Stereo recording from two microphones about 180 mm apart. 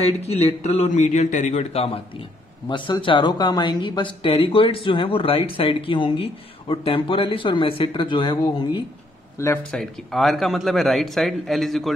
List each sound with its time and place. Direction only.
0.0 s speech: 35° left (ahead or behind)
9.4 s a man's voice: 10° left (ahead or behind)